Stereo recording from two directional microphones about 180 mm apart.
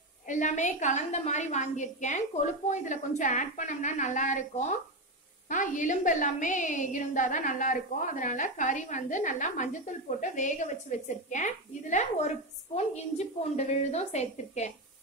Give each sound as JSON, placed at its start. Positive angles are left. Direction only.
{"t": 0.3, "sound": "a woman's voice", "side_deg": 45}